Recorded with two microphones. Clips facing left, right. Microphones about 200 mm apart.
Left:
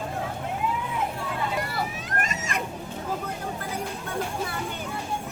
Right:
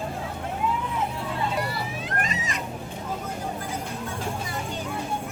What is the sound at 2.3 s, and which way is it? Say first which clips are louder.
Cat: even; 50° left (ahead or behind).